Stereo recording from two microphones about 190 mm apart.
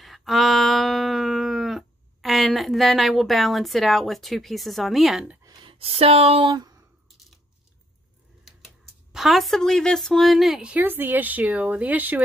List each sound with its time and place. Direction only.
0.0 s a sound: centre (ahead or behind)
5.4 s speech: 20° right (ahead or behind)
8.5 s speech: centre (ahead or behind)